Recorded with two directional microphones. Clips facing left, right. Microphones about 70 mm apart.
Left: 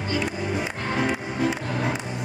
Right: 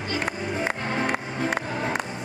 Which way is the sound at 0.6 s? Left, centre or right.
Right.